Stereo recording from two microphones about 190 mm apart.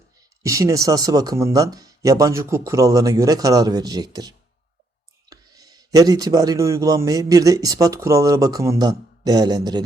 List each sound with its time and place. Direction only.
0.4 s a man's voice: 15° right (ahead or behind)